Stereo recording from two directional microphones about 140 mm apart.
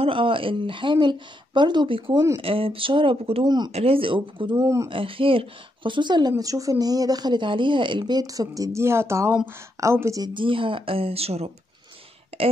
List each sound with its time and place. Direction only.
0.0 s speech: 40° right (ahead or behind)
3.4 s speech: 30° right (ahead or behind)
3.7 s speech: 45° right (ahead or behind)
4.6 s speech: 20° right (ahead or behind)
4.8 s speech: 40° right (ahead or behind)